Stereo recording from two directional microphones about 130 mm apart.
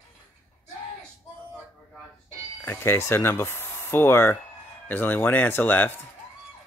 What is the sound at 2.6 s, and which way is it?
Speech, 15° left (ahead or behind).